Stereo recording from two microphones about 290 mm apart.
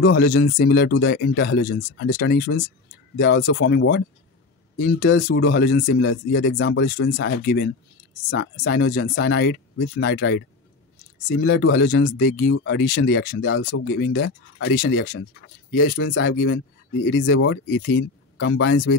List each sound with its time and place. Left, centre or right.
0.0 s speech: left